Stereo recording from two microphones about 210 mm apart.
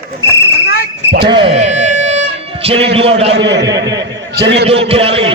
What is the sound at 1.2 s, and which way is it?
Music, 25° right (ahead or behind).